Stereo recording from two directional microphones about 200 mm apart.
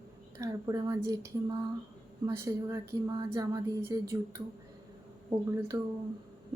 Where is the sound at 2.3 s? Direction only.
15° right (ahead or behind).